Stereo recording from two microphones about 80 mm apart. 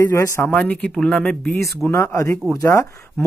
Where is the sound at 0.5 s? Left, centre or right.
Centre.